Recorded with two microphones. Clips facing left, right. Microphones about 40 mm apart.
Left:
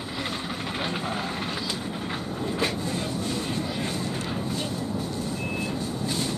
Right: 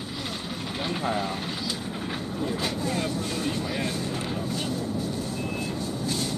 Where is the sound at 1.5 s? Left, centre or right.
Centre.